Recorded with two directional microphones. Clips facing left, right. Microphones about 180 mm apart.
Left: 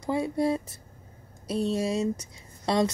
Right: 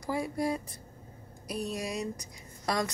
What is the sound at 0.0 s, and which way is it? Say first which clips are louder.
A woman's voice: left 5 dB; 25° left (ahead or behind).